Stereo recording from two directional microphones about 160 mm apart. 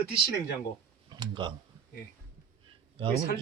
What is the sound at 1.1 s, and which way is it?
Speech, 30° right (ahead or behind).